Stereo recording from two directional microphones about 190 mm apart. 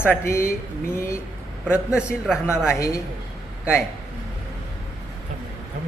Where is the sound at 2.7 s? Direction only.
15° left (ahead or behind).